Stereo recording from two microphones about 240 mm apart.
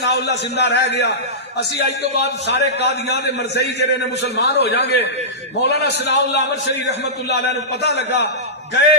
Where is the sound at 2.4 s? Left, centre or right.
Left.